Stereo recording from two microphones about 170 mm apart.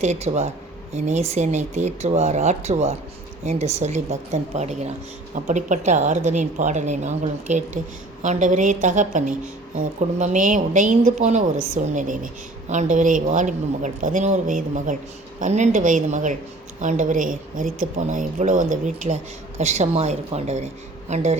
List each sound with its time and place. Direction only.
0.0 s speech: 40° right (ahead or behind)